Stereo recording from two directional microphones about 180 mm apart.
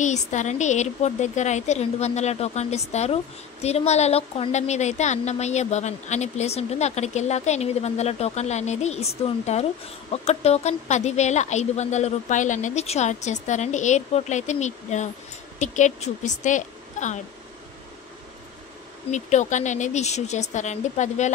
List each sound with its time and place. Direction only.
0.0 s a woman's voice: 40° left (ahead or behind)
19.1 s a woman's voice: 40° left (ahead or behind)